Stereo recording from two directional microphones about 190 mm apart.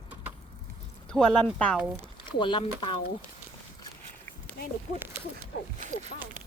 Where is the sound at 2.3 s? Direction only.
25° left (ahead or behind).